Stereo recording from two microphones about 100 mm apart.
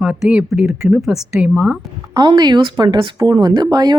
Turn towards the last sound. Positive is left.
turn(degrees=-45)  # may be behind; listen again after turning